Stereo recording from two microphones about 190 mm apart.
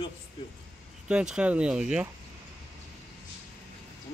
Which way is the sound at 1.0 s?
5° right (ahead or behind).